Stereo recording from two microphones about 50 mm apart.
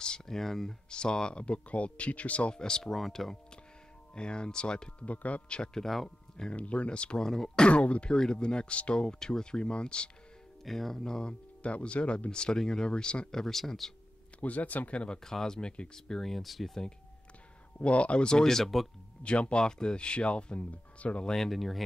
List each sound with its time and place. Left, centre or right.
0.0 s a sound: centre
0.4 s speech: centre; by 2.6 s left
2.6 s speech: centre
4.1 s speech: centre
5.0 s speech: left
6.0 s speech: centre
6.5 s speech: left
7.2 s speech: centre
10.6 s speech: centre
14.4 s speech: left
15.2 s speech: centre
17.7 s speech: left; by 18.9 s centre
19.2 s speech: left
21.4 s speech: centre